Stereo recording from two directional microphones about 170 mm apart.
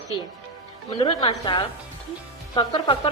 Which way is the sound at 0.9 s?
30° left (ahead or behind).